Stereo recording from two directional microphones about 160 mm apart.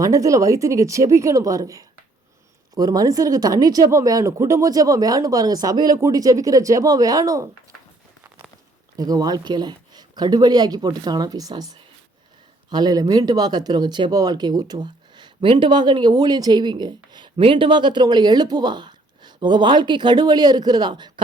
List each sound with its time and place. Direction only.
0.0 s speech: 20° right (ahead or behind)
8.4 s a sound: 5° left (ahead or behind)
9.0 s speech: 25° right (ahead or behind)